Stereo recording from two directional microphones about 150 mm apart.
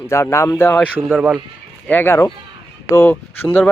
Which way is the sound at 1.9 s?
15° left (ahead or behind).